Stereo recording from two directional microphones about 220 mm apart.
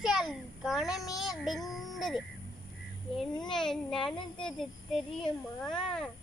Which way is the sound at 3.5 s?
Centre (ahead or behind).